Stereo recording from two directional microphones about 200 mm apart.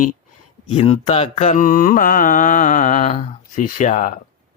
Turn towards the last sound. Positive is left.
turn(degrees=40)  # may be behind; listen again after turning